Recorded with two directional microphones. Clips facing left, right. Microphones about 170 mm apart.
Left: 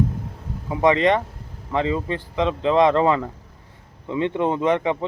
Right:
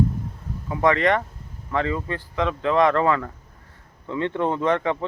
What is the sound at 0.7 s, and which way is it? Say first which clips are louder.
A man's voice: left 2 dB; 20° left (ahead or behind).